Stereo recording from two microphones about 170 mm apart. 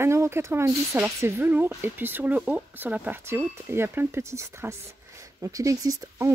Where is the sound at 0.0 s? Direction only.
15° right (ahead or behind).